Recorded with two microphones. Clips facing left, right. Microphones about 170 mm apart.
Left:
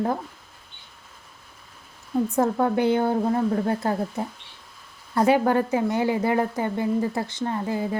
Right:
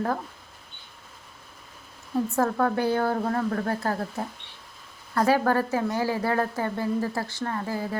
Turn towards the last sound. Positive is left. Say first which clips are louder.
# left 3 dB
turn(degrees=20)  # may be behind; listen again after turning